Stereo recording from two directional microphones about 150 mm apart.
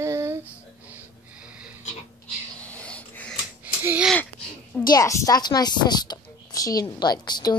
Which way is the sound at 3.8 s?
10° right (ahead or behind).